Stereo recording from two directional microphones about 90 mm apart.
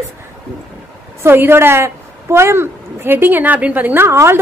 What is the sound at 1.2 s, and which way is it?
A woman's voice, 25° right (ahead or behind).